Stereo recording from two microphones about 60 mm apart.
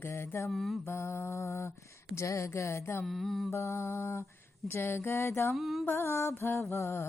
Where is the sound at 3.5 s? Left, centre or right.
Left.